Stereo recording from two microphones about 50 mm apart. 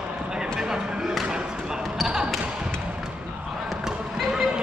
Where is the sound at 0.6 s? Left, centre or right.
Centre.